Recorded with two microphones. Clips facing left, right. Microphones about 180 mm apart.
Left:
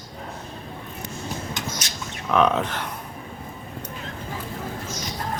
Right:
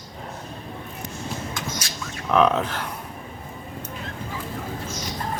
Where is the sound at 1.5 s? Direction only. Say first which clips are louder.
Even; 20° left (ahead or behind).